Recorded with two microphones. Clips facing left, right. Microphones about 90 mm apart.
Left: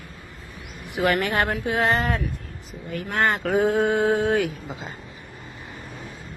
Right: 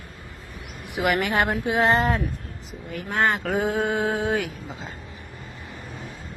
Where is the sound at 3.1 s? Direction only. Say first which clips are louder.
Left 1 dB; 5° right (ahead or behind).